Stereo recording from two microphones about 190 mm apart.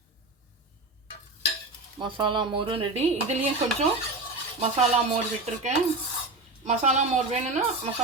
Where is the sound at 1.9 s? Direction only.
25° right (ahead or behind).